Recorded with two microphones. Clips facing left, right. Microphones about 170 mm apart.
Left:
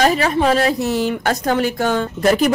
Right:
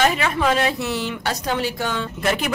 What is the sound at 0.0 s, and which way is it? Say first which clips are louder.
A woman's voice: left 4 dB; 35° left (ahead or behind).